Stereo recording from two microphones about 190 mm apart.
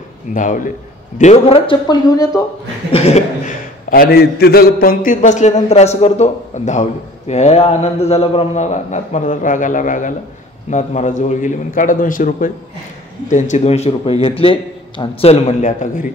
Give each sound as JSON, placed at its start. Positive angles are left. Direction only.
{"t": 0.3, "sound": "a man's voice", "side_deg": 45}
{"t": 2.9, "sound": "a man's voice", "side_deg": 35}
{"t": 3.9, "sound": "a man's voice", "side_deg": 55}